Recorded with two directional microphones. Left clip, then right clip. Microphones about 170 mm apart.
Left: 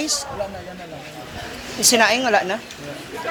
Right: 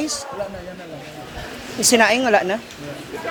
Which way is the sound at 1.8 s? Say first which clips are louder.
Right 1 dB; 55° right (ahead or behind).